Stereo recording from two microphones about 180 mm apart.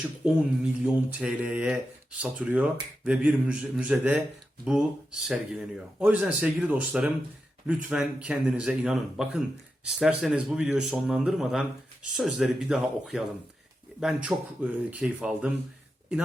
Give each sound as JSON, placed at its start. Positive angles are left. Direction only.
{"t": 0.2, "sound": "speech", "side_deg": -5}